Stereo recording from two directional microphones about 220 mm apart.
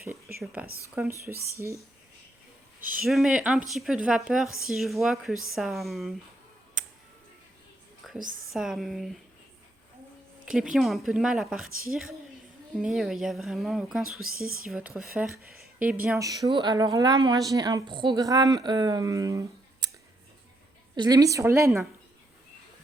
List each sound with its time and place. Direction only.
0.0 s speech: 10° right (ahead or behind)
3.0 s a woman's voice: centre (ahead or behind)
8.0 s a sound: centre (ahead or behind)
8.5 s a woman's voice: centre (ahead or behind)
10.4 s a woman's voice: 5° right (ahead or behind)
14.3 s speech: 40° right (ahead or behind)
14.7 s speech: 5° right (ahead or behind)
20.9 s speech: 20° right (ahead or behind)